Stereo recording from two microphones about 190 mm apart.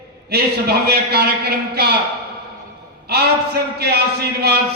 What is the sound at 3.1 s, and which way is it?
Speech, 55° right (ahead or behind).